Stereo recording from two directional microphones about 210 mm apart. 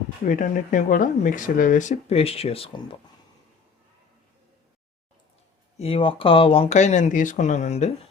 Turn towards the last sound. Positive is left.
turn(degrees=30)  # may be behind; listen again after turning